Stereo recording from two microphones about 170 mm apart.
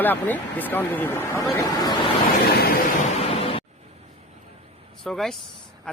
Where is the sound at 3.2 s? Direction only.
35° left (ahead or behind).